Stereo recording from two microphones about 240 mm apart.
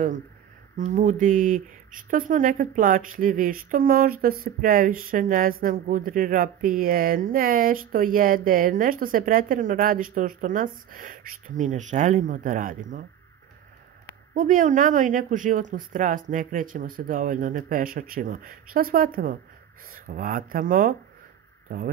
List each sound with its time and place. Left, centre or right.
0.7 s speech: right
14.3 s speech: right